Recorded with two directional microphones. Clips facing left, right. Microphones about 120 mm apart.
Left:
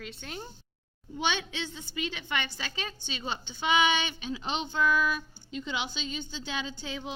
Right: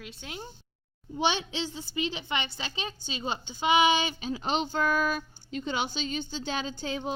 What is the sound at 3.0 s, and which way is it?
A woman's voice, 35° right (ahead or behind).